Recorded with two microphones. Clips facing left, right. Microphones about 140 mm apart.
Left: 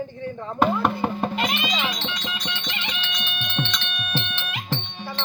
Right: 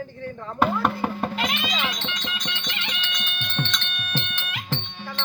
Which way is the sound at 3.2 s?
10° left (ahead or behind).